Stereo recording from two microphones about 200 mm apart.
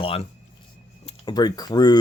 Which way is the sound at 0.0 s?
30° left (ahead or behind).